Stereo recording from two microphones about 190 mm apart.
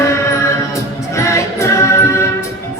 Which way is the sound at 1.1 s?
15° left (ahead or behind).